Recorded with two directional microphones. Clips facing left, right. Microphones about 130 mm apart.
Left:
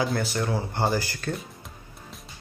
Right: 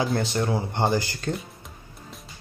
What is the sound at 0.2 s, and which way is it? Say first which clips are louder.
Speech: right 2 dB; 25° right (ahead or behind).